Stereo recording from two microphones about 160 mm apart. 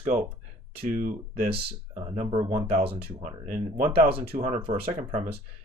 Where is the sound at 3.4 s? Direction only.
55° right (ahead or behind).